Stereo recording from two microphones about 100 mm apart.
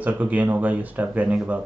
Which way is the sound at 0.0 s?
15° right (ahead or behind).